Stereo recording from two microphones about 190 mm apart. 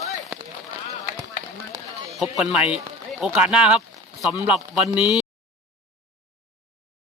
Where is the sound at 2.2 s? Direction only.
Centre (ahead or behind).